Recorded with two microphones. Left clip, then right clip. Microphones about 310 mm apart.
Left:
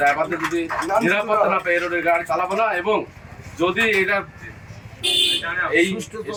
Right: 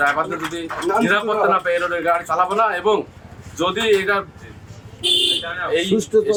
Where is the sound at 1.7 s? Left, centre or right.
Centre.